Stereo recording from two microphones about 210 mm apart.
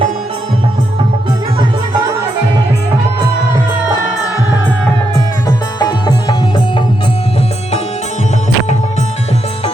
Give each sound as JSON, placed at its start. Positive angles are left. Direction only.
{"t": 5.5, "sound": "music", "side_deg": 20}